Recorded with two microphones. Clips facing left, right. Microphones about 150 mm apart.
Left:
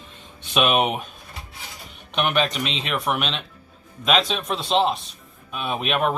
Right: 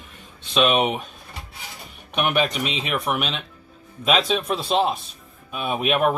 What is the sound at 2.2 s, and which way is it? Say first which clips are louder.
Speech: right 1 dB; 5° right (ahead or behind).